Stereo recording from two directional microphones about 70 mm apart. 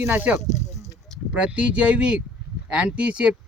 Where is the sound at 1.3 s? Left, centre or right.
Centre.